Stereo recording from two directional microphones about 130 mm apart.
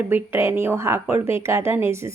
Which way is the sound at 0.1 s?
15° right (ahead or behind).